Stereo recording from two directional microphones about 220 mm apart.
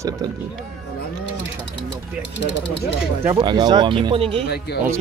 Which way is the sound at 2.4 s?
50° left (ahead or behind).